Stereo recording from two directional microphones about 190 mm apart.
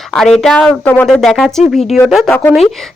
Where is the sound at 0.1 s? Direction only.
Centre (ahead or behind).